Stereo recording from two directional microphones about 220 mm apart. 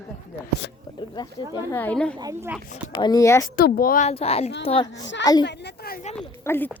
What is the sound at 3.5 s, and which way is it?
Speech, 40° left (ahead or behind).